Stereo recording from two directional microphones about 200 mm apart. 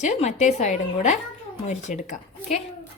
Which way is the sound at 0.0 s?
35° left (ahead or behind).